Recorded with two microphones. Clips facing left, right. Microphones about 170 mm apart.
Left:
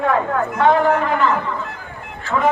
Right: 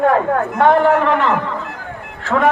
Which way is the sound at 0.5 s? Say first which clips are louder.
Right 2 dB; 65° right (ahead or behind).